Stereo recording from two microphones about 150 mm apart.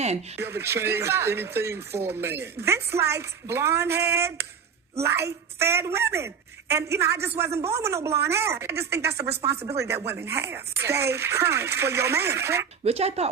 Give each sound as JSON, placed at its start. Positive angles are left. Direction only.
{"t": 0.4, "sound": "speech", "side_deg": -15}
{"t": 4.1, "sound": "a sound", "side_deg": -90}
{"t": 4.9, "sound": "speech", "side_deg": -20}
{"t": 12.8, "sound": "speech", "side_deg": -45}